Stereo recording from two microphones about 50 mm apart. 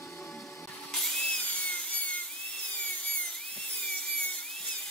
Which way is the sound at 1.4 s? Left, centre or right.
Left.